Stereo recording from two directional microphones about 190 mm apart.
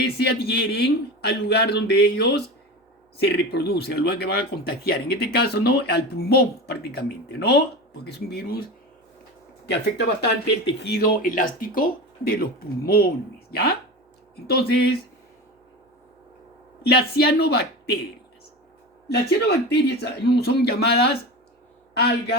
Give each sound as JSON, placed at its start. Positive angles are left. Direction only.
{"t": 0.0, "sound": "speech", "side_deg": 60}
{"t": 9.6, "sound": "speech", "side_deg": 60}
{"t": 16.9, "sound": "speech", "side_deg": 55}
{"t": 19.0, "sound": "speech", "side_deg": 60}